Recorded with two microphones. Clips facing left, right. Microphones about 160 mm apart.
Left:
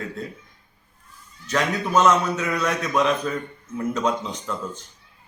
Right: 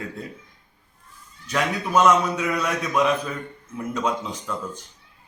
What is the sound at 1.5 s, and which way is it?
A man's voice, 10° right (ahead or behind).